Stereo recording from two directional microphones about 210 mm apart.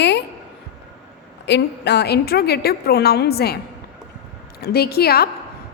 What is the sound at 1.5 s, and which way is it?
A woman's voice, 50° left (ahead or behind).